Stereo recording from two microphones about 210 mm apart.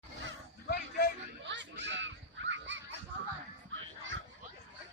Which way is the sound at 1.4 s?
60° right (ahead or behind).